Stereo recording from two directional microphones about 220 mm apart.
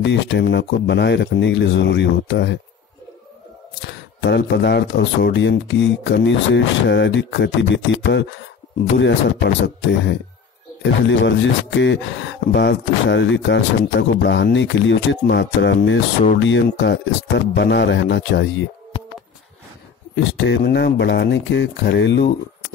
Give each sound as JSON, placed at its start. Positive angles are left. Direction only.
{"t": 0.0, "sound": "speech", "side_deg": 55}
{"t": 3.8, "sound": "speech", "side_deg": 50}
{"t": 20.3, "sound": "speech", "side_deg": 55}